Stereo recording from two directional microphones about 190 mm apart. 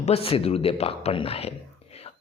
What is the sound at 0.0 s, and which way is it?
A man's voice, 30° left (ahead or behind).